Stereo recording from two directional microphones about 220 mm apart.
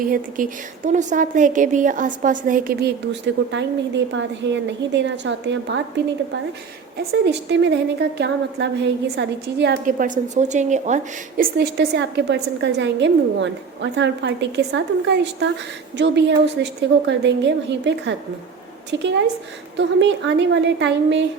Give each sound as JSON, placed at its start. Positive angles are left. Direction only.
{"t": 0.0, "sound": "a woman's voice", "side_deg": -40}
{"t": 7.1, "sound": "a woman's voice", "side_deg": -50}